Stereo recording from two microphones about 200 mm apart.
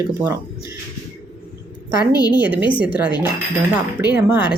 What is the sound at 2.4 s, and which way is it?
Speech, 10° right (ahead or behind).